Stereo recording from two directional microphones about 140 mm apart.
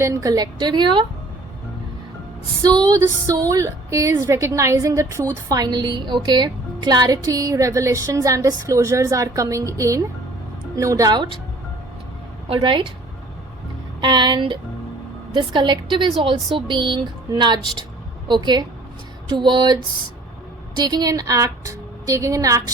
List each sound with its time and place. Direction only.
0.0 s a woman's voice: 25° right (ahead or behind)
2.6 s a woman's voice: 25° right (ahead or behind)
12.5 s speech: 35° right (ahead or behind)
14.0 s a woman's voice: 30° right (ahead or behind)